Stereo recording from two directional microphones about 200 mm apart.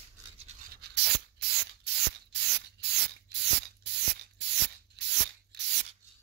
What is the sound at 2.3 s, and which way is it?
Spray, 60° right (ahead or behind).